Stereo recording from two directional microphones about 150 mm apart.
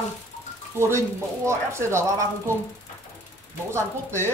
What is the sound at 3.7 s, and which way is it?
Speech, 15° right (ahead or behind).